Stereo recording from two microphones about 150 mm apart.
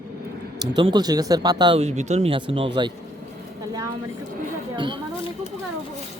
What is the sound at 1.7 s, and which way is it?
Speech, 45° right (ahead or behind).